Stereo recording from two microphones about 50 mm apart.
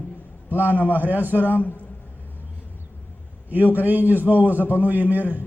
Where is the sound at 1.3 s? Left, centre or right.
Left.